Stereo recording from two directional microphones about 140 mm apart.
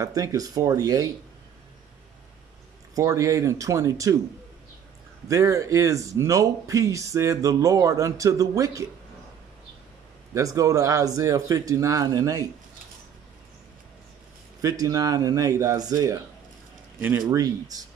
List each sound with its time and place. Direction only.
0.0 s speech: 25° right (ahead or behind)
2.9 s speech: 25° right (ahead or behind)
5.3 s speech: 25° right (ahead or behind)
10.3 s speech: 25° right (ahead or behind)
14.6 s speech: 25° right (ahead or behind)
17.3 s speech: 25° right (ahead or behind)